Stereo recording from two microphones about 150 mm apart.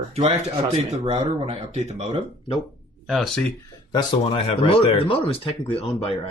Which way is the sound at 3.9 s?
40° left (ahead or behind).